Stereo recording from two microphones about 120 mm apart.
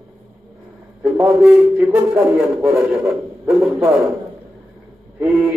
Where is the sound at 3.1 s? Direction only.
5° right (ahead or behind).